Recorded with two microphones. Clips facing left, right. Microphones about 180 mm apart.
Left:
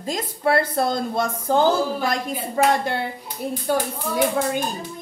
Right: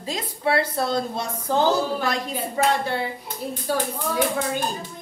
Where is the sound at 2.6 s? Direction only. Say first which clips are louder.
Left 3 dB; 45° left (ahead or behind).